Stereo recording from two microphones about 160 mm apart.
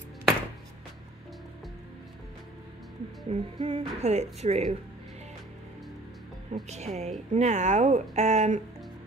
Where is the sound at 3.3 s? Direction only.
40° right (ahead or behind).